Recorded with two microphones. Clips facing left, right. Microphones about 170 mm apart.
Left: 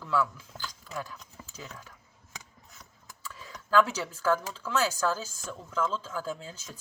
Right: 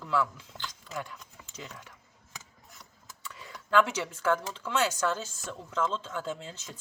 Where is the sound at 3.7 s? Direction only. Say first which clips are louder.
Left 1 dB; 25° right (ahead or behind).